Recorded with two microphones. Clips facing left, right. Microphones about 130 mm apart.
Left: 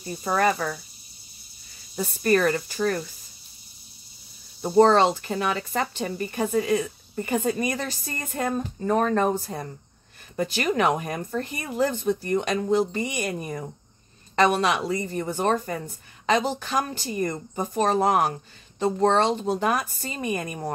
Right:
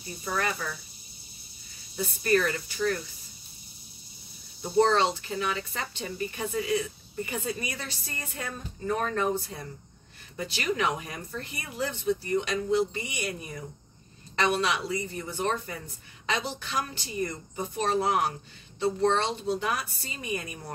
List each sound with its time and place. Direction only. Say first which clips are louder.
0.2 s speech: left 8 dB; 45° left (ahead or behind)
2.0 s speech: left 4 dB; 45° left (ahead or behind)
4.6 s speech: left 6 dB; 45° left (ahead or behind)